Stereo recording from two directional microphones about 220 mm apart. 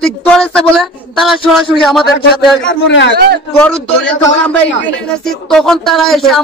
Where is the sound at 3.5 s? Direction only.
5° left (ahead or behind).